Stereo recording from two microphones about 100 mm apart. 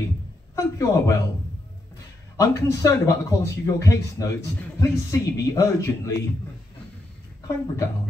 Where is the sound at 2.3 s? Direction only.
30° left (ahead or behind).